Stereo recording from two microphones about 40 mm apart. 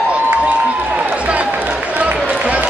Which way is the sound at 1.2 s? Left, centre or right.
Right.